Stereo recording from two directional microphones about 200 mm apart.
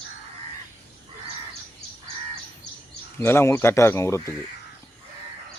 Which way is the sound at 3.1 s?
10° left (ahead or behind).